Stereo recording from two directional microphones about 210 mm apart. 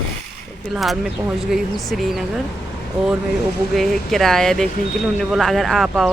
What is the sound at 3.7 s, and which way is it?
Speech, centre (ahead or behind).